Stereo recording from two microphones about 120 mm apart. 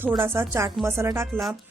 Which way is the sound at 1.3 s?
Centre (ahead or behind).